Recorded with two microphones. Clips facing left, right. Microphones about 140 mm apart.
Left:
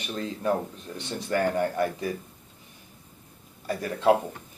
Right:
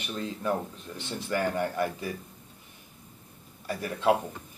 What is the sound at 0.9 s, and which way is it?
Speech, 15° left (ahead or behind).